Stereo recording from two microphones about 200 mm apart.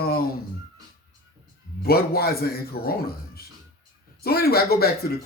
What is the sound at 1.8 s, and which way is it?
Speech, 50° left (ahead or behind).